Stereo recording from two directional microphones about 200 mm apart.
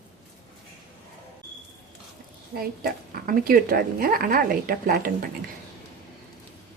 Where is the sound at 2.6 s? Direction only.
45° right (ahead or behind).